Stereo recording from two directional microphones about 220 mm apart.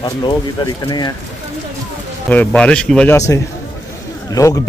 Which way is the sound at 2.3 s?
5° left (ahead or behind).